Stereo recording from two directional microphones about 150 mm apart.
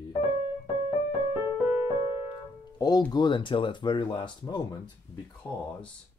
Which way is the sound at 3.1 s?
30° left (ahead or behind).